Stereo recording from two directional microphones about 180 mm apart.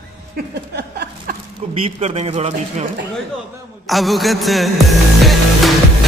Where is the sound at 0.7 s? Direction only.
60° right (ahead or behind).